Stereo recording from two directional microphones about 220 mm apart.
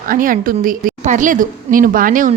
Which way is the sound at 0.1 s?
40° right (ahead or behind).